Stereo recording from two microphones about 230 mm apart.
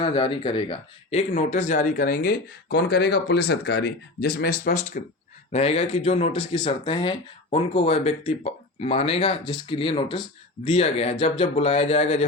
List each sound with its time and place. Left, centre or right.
0.0 s speech: left
1.3 s speech: left